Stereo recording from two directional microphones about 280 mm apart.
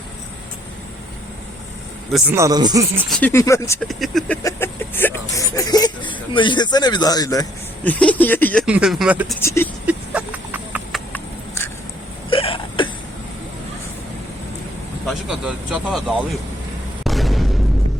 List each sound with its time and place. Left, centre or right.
2.1 s speech: centre
3.2 s speech: centre
9.4 s speech: centre
9.8 s a sound: centre
11.1 s a sound: centre
12.3 s hiccup: centre
15.0 s speech: centre
17.0 s boom: centre